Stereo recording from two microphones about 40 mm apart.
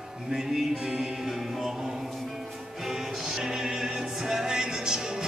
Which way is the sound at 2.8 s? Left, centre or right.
Centre.